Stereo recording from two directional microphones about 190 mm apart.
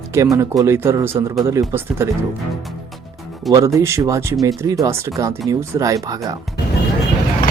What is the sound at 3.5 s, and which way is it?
Speech, 15° right (ahead or behind).